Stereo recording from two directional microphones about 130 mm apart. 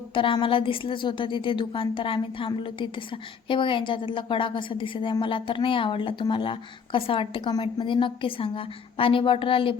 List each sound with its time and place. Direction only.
0.1 s a woman's voice: 40° left (ahead or behind)